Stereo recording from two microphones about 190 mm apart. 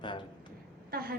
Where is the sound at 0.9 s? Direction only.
55° right (ahead or behind).